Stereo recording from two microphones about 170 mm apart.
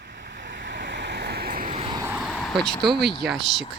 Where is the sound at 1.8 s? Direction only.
30° right (ahead or behind).